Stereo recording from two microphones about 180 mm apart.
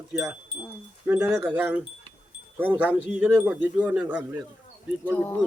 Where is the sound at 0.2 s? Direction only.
10° right (ahead or behind).